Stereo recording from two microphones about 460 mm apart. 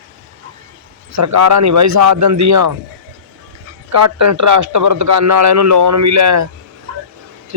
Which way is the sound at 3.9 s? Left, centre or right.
Right.